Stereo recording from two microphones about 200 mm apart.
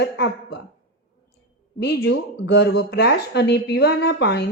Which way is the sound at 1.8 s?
60° left (ahead or behind).